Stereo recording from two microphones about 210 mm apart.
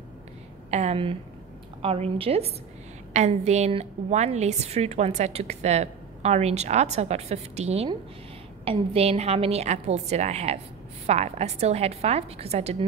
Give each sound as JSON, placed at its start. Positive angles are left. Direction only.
{"t": 0.7, "sound": "a woman's voice", "side_deg": -30}